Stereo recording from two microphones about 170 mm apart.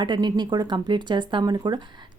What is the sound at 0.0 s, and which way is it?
A woman's voice, 25° right (ahead or behind).